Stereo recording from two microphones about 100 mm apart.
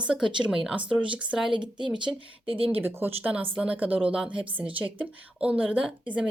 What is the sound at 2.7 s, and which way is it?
Speech, 20° right (ahead or behind).